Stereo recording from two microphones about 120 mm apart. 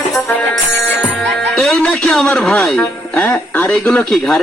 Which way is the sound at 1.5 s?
10° left (ahead or behind).